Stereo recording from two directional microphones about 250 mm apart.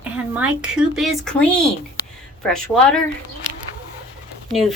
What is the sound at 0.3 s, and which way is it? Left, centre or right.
Speech, centre.